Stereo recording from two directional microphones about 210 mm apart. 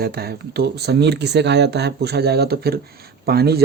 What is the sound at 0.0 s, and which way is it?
Speech, 45° right (ahead or behind).